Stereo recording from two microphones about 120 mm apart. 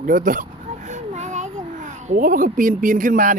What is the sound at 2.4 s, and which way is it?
Speech, 90° right.